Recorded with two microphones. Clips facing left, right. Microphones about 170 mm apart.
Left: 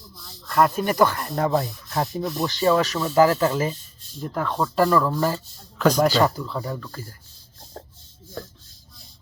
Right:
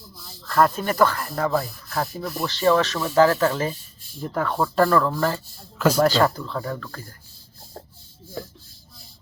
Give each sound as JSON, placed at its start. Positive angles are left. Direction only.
{"t": 0.2, "sound": "speech", "side_deg": 0}
{"t": 1.9, "sound": "sanding", "side_deg": 25}
{"t": 2.4, "sound": "speech", "side_deg": 15}
{"t": 3.7, "sound": "a sound", "side_deg": -10}
{"t": 4.2, "sound": "speech", "side_deg": 0}
{"t": 4.8, "sound": "speech", "side_deg": 10}
{"t": 8.4, "sound": "a sound", "side_deg": -10}